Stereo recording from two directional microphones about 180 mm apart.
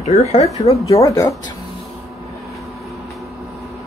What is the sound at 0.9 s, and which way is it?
Speech, 20° left (ahead or behind).